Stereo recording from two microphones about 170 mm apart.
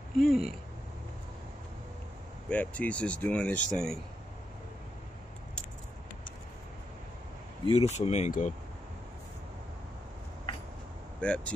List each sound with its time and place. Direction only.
0.3 s speech: centre (ahead or behind)
2.5 s speech: 10° left (ahead or behind)
7.6 s speech: 35° left (ahead or behind)
11.1 s speech: 5° left (ahead or behind)